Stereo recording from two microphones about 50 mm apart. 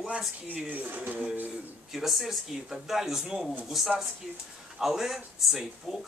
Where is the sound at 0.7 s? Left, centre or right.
Right.